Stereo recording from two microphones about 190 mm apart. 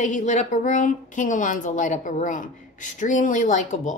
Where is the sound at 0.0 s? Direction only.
40° left (ahead or behind).